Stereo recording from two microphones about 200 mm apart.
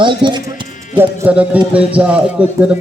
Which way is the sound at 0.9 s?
10° right (ahead or behind).